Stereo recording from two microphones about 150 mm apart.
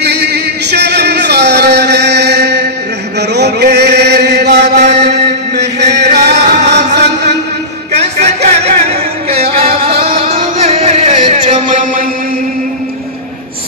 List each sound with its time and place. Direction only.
0.0 s music: 90° right
3.2 s chant: 90° right
4.7 s mantra: 50° right (ahead or behind)
5.6 s chant: 90° right
6.9 s a sound: 90° right
7.9 s music: 45° right (ahead or behind); by 12.1 s 65° right (ahead or behind)